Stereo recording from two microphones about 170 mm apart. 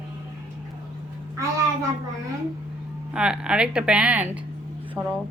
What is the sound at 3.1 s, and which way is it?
Speech, 5° right (ahead or behind).